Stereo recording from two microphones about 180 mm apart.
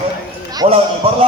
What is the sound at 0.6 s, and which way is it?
Speech, 30° right (ahead or behind).